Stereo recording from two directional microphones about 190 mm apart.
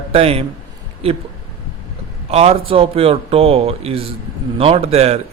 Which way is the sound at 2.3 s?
35° right (ahead or behind).